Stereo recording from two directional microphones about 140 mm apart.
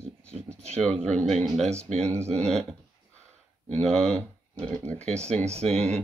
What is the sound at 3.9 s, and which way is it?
Speech, 5° left (ahead or behind).